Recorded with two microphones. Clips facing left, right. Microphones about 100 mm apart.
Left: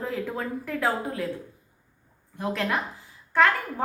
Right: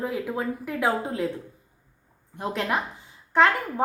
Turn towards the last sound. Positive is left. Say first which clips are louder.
# right 1 dB
turn(degrees=-20)  # may be behind; listen again after turning